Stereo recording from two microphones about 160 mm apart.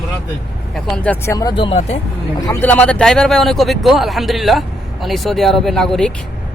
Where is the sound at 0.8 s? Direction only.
Centre (ahead or behind); by 1.5 s 20° left (ahead or behind).